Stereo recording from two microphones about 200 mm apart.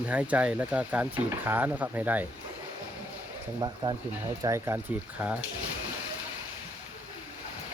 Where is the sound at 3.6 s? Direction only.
20° right (ahead or behind).